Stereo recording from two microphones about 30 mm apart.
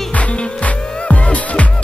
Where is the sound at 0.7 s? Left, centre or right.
Left.